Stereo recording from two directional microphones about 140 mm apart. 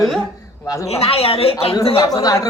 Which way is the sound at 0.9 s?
45° left (ahead or behind).